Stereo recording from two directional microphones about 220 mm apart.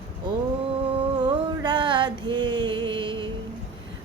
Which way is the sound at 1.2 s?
20° right (ahead or behind).